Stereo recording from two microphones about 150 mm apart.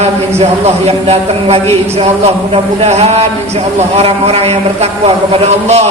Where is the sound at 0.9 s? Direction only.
45° right (ahead or behind).